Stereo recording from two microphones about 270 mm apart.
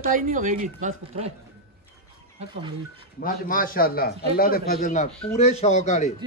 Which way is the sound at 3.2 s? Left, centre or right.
Left.